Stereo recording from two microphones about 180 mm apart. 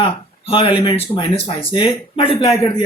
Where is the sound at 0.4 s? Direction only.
30° left (ahead or behind).